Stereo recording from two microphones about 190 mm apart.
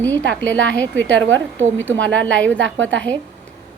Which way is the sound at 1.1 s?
80° right.